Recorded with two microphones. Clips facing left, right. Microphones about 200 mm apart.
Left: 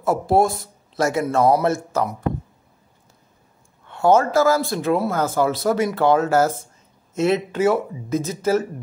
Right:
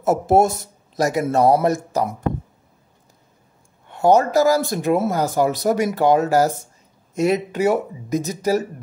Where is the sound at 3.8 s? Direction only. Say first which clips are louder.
Right 1 dB; 15° right (ahead or behind).